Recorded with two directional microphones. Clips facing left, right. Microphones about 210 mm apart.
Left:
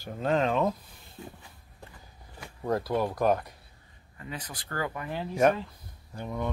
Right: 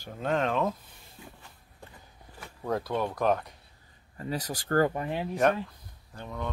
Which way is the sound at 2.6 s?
5° left (ahead or behind).